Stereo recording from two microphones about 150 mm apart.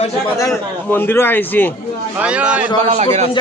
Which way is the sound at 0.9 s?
15° left (ahead or behind).